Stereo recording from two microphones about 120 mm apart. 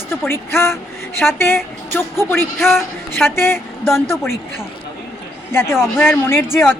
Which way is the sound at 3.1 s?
20° left (ahead or behind).